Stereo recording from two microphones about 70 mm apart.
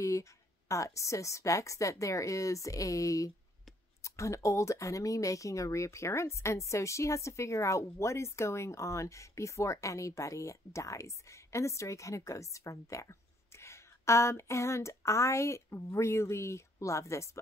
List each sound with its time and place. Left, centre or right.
0.0 s a woman's voice: left